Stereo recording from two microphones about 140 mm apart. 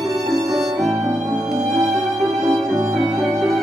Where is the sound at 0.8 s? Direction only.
5° right (ahead or behind).